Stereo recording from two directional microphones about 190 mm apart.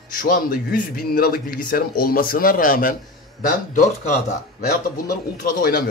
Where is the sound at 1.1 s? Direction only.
50° left (ahead or behind).